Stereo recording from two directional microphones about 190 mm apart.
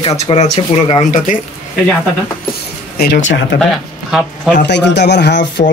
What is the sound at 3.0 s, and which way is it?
Speech, 70° left (ahead or behind).